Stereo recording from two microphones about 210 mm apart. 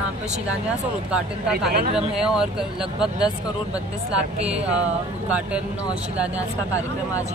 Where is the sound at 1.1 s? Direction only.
5° right (ahead or behind).